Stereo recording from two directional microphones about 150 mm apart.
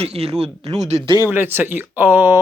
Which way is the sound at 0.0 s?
45° right (ahead or behind).